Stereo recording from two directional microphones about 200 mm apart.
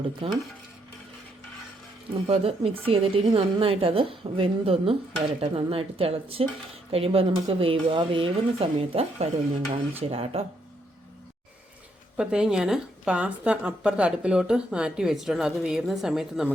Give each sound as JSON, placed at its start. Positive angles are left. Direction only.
{"t": 0.2, "sound": "speech", "side_deg": -30}
{"t": 2.2, "sound": "speech", "side_deg": -30}
{"t": 12.1, "sound": "a woman's voice", "side_deg": -5}